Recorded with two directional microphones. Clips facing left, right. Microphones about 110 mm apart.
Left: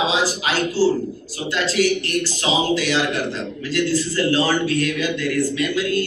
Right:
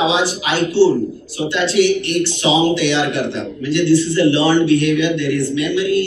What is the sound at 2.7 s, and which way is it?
Speech, 40° left (ahead or behind).